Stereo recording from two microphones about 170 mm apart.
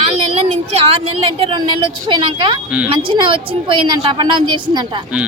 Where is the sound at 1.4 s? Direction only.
30° right (ahead or behind).